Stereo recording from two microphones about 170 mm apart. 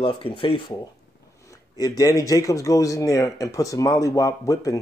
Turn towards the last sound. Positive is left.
turn(degrees=20)  # may be behind; listen again after turning